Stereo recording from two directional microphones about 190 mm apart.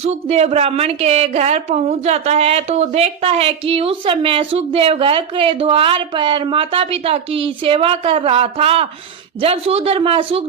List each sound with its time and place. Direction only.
0.0 s a woman's voice: 35° right (ahead or behind)